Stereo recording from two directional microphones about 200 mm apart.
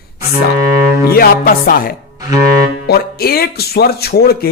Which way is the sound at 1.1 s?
50° left (ahead or behind).